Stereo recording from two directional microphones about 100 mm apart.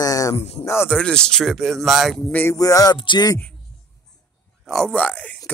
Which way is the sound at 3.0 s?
55° left (ahead or behind).